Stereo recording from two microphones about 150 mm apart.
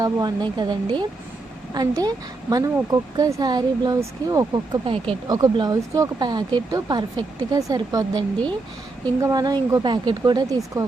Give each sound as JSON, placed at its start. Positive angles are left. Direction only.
{"t": 0.0, "sound": "speech", "side_deg": -25}
{"t": 9.2, "sound": "speech", "side_deg": -25}